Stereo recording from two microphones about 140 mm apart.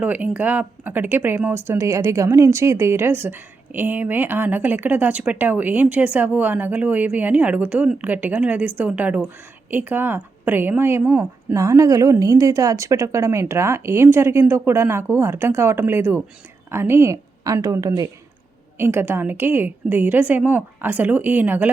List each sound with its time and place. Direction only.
0.0 s a woman's voice: 10° right (ahead or behind)